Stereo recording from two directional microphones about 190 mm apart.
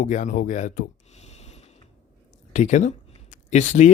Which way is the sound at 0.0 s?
40° left (ahead or behind).